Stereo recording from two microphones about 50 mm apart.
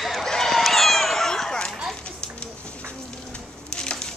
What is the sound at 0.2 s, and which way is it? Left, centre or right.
Run, centre.